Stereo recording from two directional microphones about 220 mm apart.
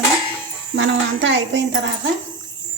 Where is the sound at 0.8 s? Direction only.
55° right (ahead or behind).